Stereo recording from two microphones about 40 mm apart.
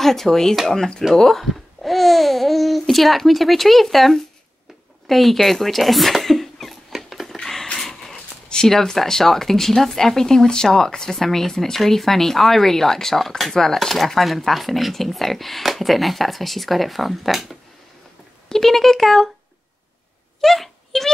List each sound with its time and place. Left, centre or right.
0.0 s speech: centre
7.0 s a sound: centre
7.8 s speech: centre
11.1 s speech: centre
20.3 s wail: centre